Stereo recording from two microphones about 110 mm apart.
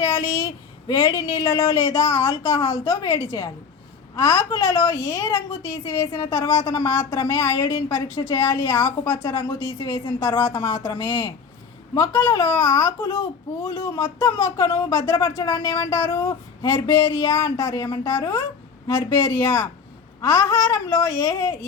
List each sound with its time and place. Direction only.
0.0 s speech: 30° left (ahead or behind)